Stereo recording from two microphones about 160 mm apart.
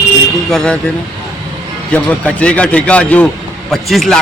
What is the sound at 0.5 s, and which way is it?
Speech, 5° left (ahead or behind).